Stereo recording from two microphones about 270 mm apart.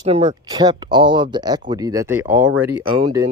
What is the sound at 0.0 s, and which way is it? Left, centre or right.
Speech, right.